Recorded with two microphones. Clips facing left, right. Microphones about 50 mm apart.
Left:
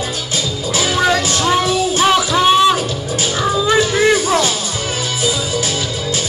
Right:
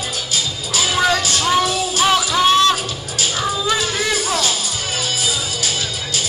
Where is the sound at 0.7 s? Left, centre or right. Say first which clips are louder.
Left 3 dB; left.